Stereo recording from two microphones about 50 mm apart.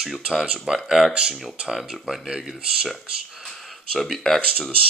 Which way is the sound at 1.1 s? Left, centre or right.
Centre.